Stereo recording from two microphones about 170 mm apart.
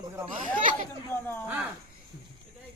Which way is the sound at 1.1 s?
15° left (ahead or behind).